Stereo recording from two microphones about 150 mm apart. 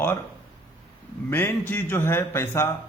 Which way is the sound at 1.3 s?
15° left (ahead or behind).